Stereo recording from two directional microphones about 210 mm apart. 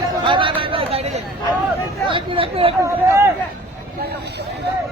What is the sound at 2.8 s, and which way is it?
Speech, 15° right (ahead or behind).